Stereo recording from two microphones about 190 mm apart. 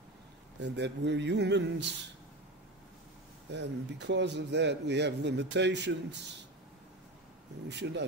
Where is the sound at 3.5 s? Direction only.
65° right (ahead or behind).